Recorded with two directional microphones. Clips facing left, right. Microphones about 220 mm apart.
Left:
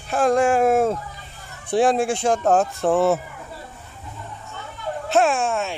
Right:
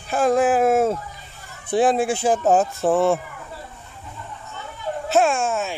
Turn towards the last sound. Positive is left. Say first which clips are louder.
# even
turn(degrees=0)  # may be behind; listen again after turning